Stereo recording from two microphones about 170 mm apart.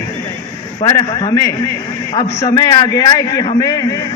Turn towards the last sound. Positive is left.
turn(degrees=20)  # may be behind; listen again after turning